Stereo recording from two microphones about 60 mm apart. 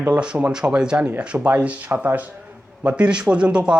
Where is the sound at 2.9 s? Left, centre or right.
Centre.